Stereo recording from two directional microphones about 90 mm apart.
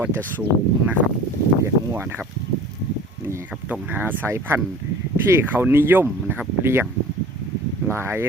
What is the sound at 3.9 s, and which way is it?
Speech, 20° right (ahead or behind).